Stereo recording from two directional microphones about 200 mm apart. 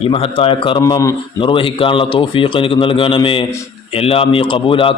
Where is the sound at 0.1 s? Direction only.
30° left (ahead or behind).